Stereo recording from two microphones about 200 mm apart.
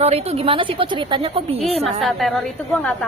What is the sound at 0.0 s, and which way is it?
A woman's voice, 30° right (ahead or behind).